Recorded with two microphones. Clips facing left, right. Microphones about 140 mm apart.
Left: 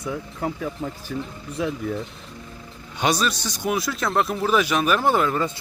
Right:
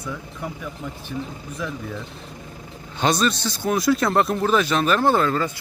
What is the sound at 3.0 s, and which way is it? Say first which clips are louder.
Speech: right 2 dB; 10° left (ahead or behind).